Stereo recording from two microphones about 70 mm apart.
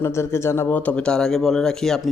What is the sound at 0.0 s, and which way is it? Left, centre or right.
Speech, left.